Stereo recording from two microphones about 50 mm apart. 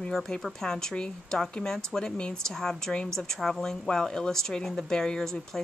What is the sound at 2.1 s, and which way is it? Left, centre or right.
Speech, left.